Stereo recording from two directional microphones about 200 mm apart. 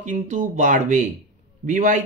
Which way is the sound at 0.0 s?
40° right (ahead or behind).